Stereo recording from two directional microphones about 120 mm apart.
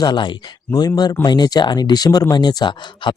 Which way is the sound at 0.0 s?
40° left (ahead or behind).